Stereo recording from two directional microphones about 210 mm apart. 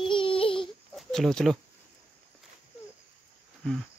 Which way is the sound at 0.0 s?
25° left (ahead or behind).